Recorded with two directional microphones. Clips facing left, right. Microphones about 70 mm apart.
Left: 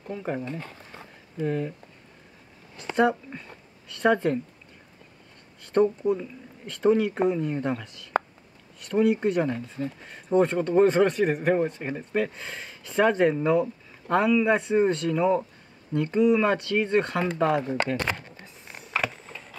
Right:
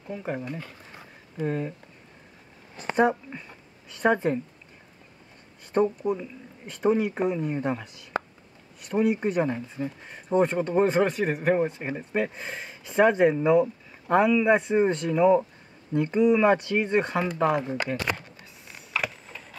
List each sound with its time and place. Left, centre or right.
0.1 s speech: centre
1.4 s speech: right
2.7 s a sound: right
3.9 s speech: centre
5.6 s speech: centre
14.7 s speech: right
18.2 s a sound: left